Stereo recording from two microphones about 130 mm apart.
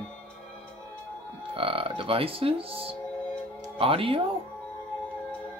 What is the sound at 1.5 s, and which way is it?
Speech, 45° right (ahead or behind).